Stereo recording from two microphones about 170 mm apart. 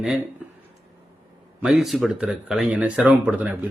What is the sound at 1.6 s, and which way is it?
Speech, centre (ahead or behind).